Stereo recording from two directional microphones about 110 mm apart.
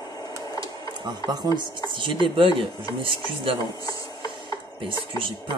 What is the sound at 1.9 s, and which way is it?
Speech, 50° right (ahead or behind).